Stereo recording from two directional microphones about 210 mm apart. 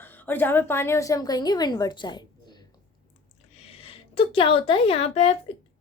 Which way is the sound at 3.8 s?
25° left (ahead or behind).